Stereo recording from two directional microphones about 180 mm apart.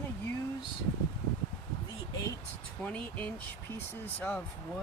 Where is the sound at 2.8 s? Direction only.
10° left (ahead or behind).